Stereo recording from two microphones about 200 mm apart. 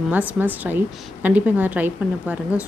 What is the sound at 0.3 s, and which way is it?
A woman's voice, 10° right (ahead or behind).